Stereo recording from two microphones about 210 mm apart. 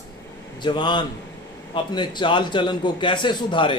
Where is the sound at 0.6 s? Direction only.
20° left (ahead or behind).